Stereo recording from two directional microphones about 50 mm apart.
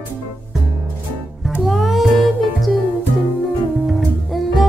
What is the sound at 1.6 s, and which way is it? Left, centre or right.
Music, centre.